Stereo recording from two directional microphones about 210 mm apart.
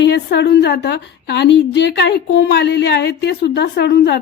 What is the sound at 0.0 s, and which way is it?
A woman's voice, 50° left (ahead or behind).